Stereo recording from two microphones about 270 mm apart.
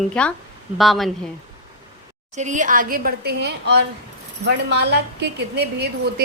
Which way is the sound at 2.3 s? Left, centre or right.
Right.